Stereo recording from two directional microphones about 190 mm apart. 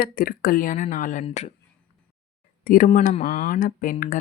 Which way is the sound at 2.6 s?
45° left (ahead or behind).